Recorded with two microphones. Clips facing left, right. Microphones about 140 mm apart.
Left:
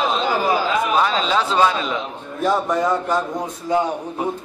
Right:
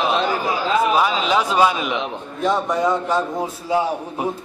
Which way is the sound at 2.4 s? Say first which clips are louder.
Even; centre (ahead or behind).